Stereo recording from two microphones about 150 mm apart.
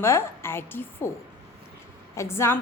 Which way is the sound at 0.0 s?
15° left (ahead or behind).